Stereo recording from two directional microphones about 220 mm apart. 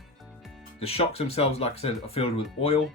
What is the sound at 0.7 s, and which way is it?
Speech, 25° left (ahead or behind).